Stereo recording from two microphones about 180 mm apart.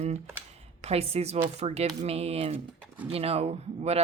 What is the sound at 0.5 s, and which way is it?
Speech, 35° right (ahead or behind).